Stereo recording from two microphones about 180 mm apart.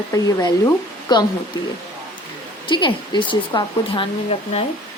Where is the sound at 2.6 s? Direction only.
25° left (ahead or behind).